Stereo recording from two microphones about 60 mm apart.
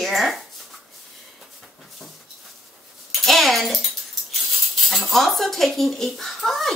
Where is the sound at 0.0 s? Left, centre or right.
Centre.